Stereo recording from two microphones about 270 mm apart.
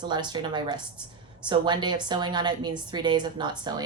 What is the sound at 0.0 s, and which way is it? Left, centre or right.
Speech, centre.